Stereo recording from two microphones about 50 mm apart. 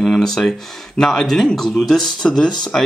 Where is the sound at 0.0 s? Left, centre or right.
Centre.